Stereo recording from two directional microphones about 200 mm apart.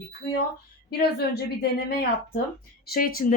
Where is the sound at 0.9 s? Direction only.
50° left (ahead or behind).